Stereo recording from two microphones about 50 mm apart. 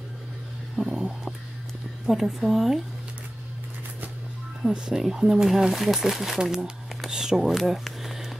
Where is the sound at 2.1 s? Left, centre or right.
Centre.